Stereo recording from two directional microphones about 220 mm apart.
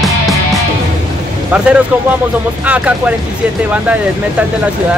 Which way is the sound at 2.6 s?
5° right (ahead or behind).